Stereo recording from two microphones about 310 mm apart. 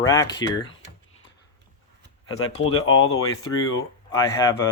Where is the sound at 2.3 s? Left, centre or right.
Left.